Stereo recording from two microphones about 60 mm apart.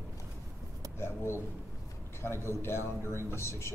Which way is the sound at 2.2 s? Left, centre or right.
Left.